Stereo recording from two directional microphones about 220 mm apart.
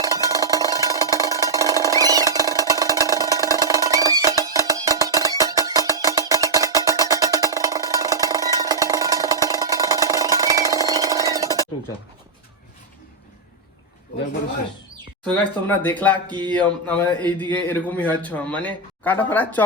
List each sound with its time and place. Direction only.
0.0 s cowbell: 15° right (ahead or behind)
15.3 s speech: 10° left (ahead or behind)